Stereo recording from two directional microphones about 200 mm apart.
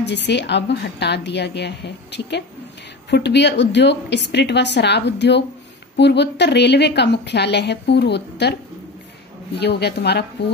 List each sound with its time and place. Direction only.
0.0 s a woman's voice: 60° left (ahead or behind)
9.6 s a woman's voice: 55° left (ahead or behind)